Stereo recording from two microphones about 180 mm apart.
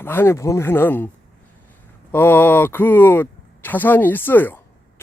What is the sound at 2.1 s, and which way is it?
Speech, 10° left (ahead or behind).